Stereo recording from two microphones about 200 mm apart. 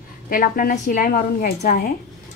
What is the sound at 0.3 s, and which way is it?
A woman's voice, 45° left (ahead or behind).